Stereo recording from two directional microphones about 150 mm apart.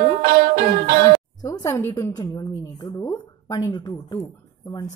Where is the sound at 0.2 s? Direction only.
45° right (ahead or behind).